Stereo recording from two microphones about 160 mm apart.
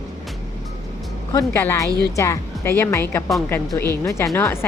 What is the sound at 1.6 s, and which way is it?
A woman's voice, 15° left (ahead or behind).